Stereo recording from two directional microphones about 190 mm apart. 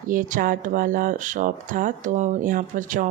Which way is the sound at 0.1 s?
45° right (ahead or behind).